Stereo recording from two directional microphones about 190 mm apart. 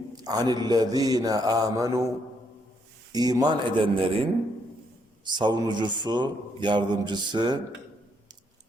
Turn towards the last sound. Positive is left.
turn(degrees=-25)  # may be behind; listen again after turning